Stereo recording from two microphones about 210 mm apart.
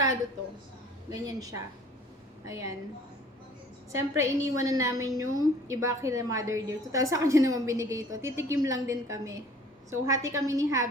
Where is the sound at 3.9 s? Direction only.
15° right (ahead or behind).